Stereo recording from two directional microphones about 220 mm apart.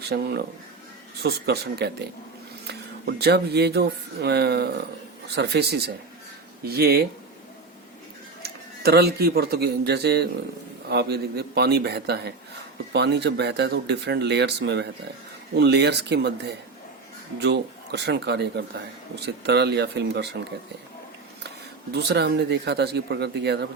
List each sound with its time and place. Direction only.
0.0 s speech: 50° right (ahead or behind)
8.4 s speech: 45° right (ahead or behind)
21.9 s speech: 50° right (ahead or behind)